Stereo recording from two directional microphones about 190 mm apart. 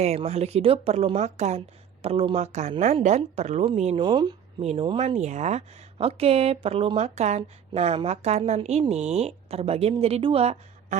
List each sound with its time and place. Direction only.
0.0 s speech: 35° right (ahead or behind)